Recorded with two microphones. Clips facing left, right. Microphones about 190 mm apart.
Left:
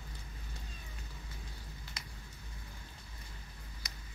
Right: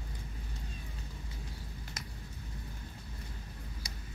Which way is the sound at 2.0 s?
45° right (ahead or behind).